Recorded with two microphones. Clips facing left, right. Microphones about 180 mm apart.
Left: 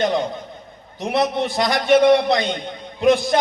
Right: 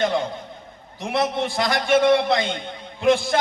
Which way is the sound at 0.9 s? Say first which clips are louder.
Left 3 dB; 20° left (ahead or behind).